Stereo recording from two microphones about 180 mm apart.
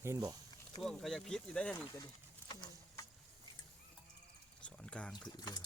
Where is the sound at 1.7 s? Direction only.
15° left (ahead or behind).